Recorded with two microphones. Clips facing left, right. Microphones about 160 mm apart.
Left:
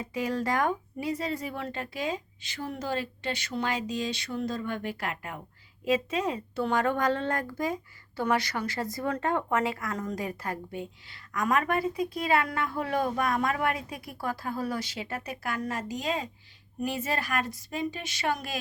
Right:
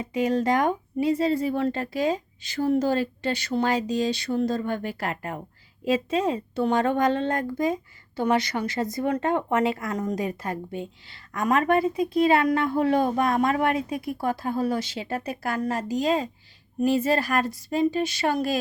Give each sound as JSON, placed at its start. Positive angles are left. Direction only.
{"t": 0.0, "sound": "a woman's voice", "side_deg": -20}